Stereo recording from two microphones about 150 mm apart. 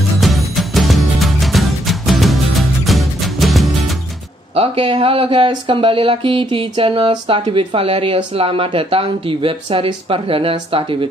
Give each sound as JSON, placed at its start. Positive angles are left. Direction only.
{"t": 0.2, "sound": "music", "side_deg": 0}
{"t": 4.6, "sound": "speech", "side_deg": -40}